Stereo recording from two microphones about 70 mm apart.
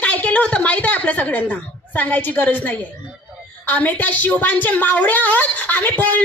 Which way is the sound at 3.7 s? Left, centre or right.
Left.